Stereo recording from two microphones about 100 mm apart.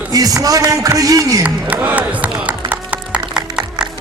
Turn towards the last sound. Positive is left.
turn(degrees=-10)  # may be behind; listen again after turning